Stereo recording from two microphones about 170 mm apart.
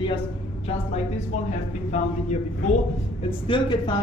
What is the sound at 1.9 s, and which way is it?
Speech, 45° left (ahead or behind).